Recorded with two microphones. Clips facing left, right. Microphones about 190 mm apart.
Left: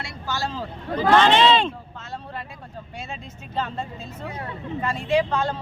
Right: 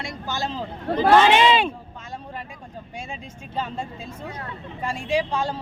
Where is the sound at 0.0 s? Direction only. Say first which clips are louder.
Even; 20° right (ahead or behind).